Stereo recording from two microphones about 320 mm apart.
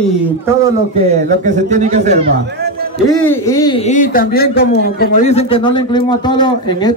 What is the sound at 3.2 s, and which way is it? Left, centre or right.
A man's voice, centre.